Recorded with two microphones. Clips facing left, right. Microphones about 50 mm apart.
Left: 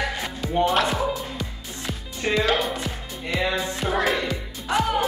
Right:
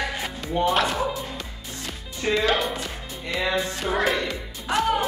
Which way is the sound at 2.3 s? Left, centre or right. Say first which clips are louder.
Even; centre.